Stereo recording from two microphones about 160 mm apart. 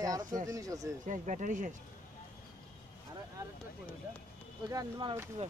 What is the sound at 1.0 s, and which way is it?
Speech, 50° right (ahead or behind).